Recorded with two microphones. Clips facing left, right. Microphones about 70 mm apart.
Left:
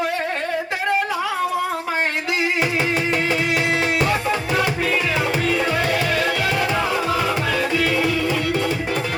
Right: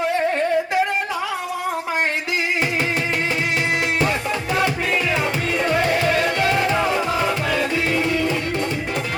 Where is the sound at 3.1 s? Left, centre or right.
Right.